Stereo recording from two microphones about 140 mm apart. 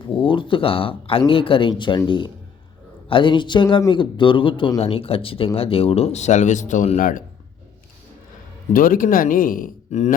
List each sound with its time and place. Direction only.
0.2 s speech: 35° left (ahead or behind); by 7.0 s 55° left (ahead or behind)
8.7 s speech: 85° left
9.9 s speech: 50° left (ahead or behind)